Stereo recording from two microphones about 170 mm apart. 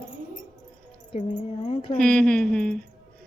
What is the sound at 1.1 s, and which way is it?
Speech, 35° left (ahead or behind).